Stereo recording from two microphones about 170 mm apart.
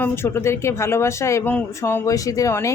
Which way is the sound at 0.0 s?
15° left (ahead or behind).